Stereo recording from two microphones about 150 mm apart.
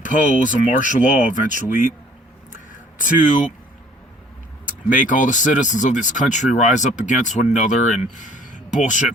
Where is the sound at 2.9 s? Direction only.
60° left (ahead or behind).